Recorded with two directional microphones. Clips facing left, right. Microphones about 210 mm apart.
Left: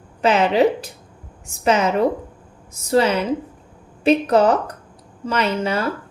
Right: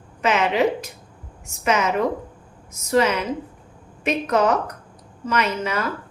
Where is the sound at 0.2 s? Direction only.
35° left (ahead or behind).